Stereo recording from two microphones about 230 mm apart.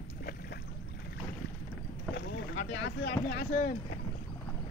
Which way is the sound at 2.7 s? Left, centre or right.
Left.